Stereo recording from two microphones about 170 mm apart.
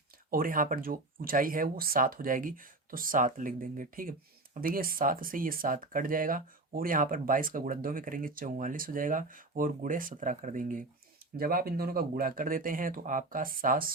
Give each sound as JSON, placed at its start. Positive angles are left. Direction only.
{"t": 0.3, "sound": "speech", "side_deg": -55}